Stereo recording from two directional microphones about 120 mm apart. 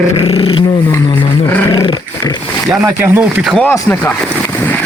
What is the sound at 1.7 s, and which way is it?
Dog, 35° left (ahead or behind).